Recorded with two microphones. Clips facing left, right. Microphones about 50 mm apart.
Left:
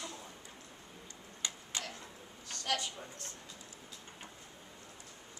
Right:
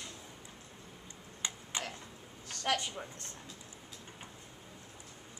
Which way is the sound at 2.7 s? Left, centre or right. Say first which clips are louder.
Right 3 dB; right.